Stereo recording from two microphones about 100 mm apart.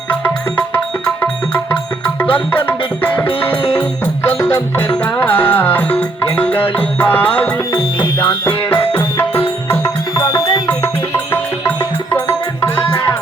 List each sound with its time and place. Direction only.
0.1 s music: 20° left (ahead or behind)
8.9 s music: 25° left (ahead or behind)
10.2 s music: 40° left (ahead or behind)
10.7 s music: 25° left (ahead or behind)